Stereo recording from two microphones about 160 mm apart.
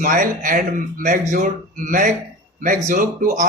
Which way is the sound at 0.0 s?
55° right (ahead or behind).